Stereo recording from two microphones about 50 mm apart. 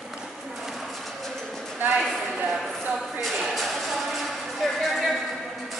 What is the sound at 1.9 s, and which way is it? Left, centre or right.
Clip-clop, centre.